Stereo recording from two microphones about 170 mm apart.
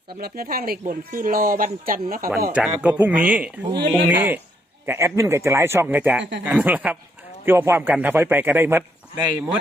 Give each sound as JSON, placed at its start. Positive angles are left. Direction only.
{"t": 0.2, "sound": "speech", "side_deg": -65}
{"t": 2.5, "sound": "a man's voice", "side_deg": -5}